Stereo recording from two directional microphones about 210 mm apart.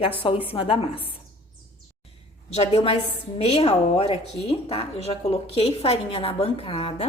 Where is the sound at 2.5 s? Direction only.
30° left (ahead or behind).